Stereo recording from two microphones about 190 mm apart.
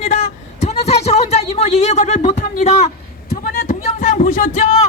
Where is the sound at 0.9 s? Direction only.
35° left (ahead or behind).